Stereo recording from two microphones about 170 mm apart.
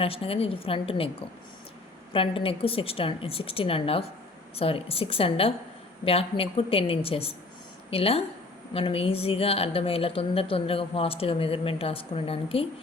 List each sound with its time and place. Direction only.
0.0 s a woman's voice: 35° left (ahead or behind)
2.1 s a woman's voice: 30° left (ahead or behind)